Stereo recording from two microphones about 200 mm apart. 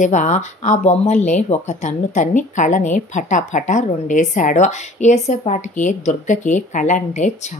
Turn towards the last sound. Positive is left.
turn(degrees=35)  # may be behind; listen again after turning